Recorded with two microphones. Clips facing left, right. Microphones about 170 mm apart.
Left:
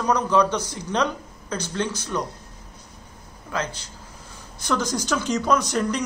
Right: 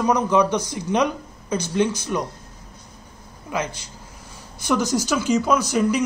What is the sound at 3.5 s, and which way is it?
Speech, 10° right (ahead or behind).